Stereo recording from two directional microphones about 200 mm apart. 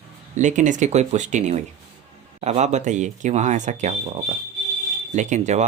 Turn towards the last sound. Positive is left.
turn(degrees=-35)  # may be behind; listen again after turning